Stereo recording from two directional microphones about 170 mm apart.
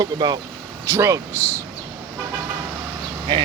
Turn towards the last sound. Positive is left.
turn(degrees=-25)  # may be behind; listen again after turning